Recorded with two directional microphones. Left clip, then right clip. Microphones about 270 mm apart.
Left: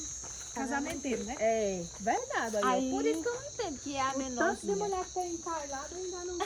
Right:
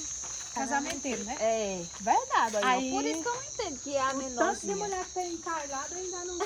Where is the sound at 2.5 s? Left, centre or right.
Right.